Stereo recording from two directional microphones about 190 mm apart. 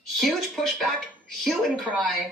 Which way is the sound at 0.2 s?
Centre (ahead or behind).